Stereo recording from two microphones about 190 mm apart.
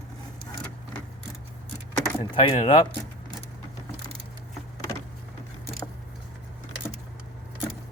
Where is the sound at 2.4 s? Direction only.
30° left (ahead or behind).